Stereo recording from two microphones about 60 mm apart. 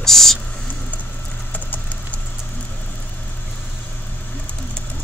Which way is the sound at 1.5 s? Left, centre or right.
Left.